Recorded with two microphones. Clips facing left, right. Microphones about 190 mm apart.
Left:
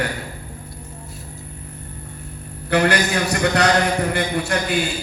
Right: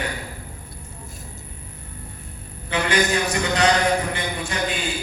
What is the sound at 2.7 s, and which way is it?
Speech, 65° left (ahead or behind).